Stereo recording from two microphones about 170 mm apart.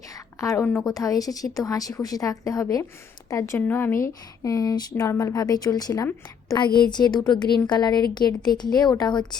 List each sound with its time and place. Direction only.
0.3 s a woman's voice: 20° left (ahead or behind)